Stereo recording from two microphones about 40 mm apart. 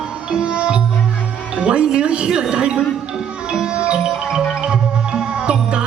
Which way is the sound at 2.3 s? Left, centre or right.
Centre.